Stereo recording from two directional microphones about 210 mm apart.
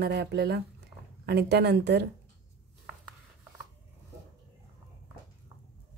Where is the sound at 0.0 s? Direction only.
55° right (ahead or behind).